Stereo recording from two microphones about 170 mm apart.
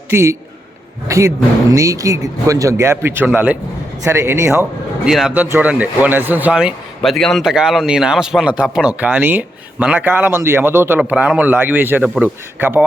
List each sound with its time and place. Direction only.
0.1 s a man's voice: 15° right (ahead or behind)
5.0 s speech: 5° right (ahead or behind)